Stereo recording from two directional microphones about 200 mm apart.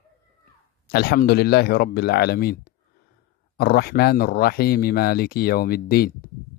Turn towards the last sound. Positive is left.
turn(degrees=50)  # may be behind; listen again after turning